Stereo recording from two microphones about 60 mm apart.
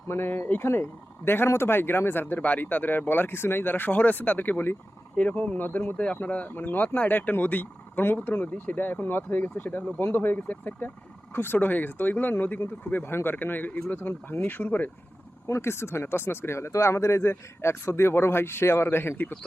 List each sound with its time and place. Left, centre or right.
0.1 s speech: left
15.4 s speech: left